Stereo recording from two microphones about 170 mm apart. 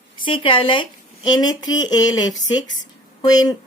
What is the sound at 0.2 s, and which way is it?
A woman's voice, 30° left (ahead or behind).